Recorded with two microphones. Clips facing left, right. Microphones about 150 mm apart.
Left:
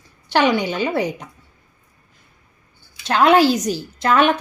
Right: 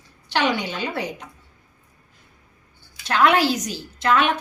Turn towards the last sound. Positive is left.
turn(degrees=40)  # may be behind; listen again after turning